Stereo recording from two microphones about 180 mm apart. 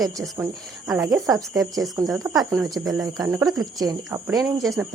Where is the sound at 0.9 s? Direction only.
20° right (ahead or behind).